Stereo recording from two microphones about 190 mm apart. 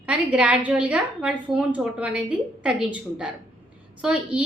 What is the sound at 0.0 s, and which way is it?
A woman's voice, 5° right (ahead or behind).